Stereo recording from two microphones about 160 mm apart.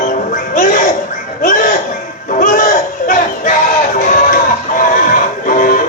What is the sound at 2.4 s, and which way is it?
Crowd, 55° left (ahead or behind).